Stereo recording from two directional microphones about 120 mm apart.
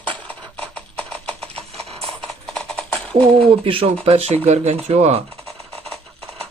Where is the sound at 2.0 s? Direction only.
5° left (ahead or behind).